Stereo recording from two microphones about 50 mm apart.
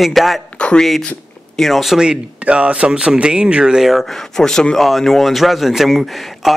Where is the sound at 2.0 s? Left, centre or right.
Centre.